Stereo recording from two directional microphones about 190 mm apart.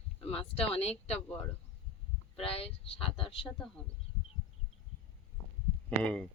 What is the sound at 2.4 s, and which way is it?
Speech, 30° left (ahead or behind).